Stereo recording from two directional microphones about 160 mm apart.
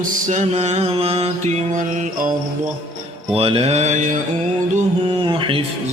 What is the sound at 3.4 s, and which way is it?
Mantra, 35° right (ahead or behind).